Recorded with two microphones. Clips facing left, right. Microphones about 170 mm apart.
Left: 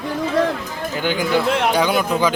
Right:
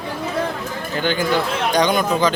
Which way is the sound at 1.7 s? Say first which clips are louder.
Right 1 dB; 5° left (ahead or behind).